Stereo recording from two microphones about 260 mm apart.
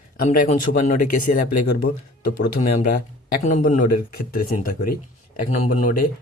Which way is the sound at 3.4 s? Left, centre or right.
Left.